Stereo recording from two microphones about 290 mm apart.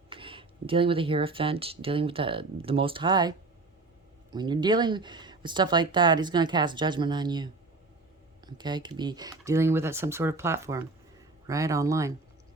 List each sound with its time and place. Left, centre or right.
0.1 s speech: centre